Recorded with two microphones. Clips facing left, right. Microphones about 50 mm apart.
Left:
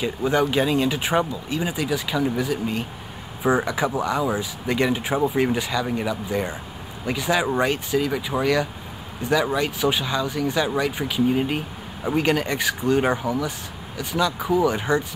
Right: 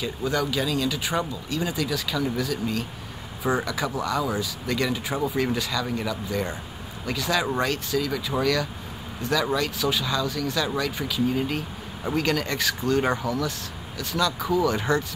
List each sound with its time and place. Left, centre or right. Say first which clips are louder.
0.0 s speech: left 5 dB; left
1.3 s speech: left 2 dB; centre